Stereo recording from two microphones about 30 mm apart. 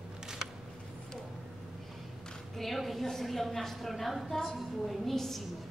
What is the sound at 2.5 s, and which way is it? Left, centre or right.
A woman's voice, centre.